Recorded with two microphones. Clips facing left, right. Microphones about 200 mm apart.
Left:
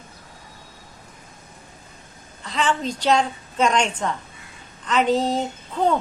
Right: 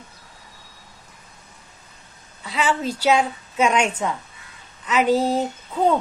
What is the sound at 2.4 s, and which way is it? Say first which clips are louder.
A woman's voice: right 1 dB; 10° right (ahead or behind).